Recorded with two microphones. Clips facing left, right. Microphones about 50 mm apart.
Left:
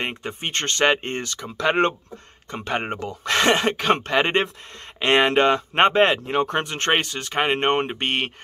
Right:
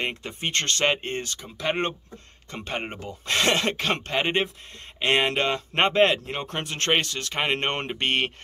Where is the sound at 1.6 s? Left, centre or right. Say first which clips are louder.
Left 7 dB; left.